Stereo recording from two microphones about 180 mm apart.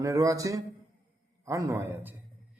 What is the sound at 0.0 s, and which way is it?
A man's voice, 20° right (ahead or behind).